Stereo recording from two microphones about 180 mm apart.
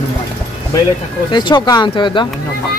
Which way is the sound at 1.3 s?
25° left (ahead or behind).